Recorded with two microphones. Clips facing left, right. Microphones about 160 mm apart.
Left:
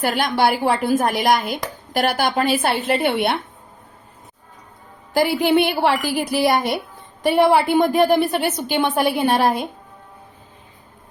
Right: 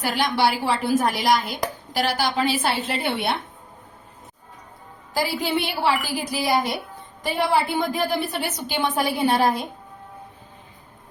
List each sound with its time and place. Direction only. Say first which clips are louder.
0.0 s speech: left 3 dB; 55° left (ahead or behind)
5.1 s a woman's voice: left 8 dB; 60° left (ahead or behind)